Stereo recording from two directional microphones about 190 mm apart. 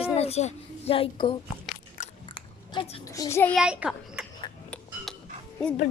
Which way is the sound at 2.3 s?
25° left (ahead or behind).